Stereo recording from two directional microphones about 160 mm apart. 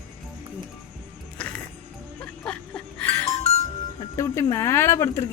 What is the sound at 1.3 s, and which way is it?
Music, 10° left (ahead or behind).